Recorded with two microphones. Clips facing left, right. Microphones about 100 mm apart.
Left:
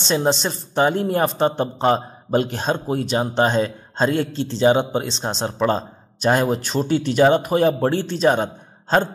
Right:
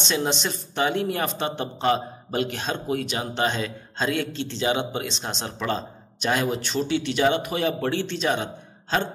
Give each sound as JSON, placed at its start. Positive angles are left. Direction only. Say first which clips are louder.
{"t": 0.0, "sound": "a man's voice", "louder": "left 6 dB", "side_deg": 35}